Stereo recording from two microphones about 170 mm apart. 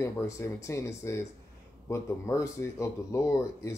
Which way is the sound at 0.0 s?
15° left (ahead or behind).